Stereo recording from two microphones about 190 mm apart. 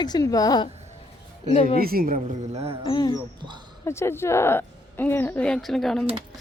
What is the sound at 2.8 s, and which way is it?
Speech, 20° left (ahead or behind).